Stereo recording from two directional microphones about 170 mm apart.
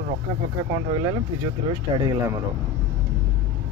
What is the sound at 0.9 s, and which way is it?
Speech, 25° right (ahead or behind).